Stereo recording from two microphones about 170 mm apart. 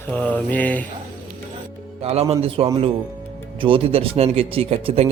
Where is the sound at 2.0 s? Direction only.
35° right (ahead or behind).